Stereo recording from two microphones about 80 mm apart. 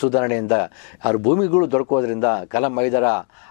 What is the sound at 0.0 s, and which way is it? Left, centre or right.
Speech, centre.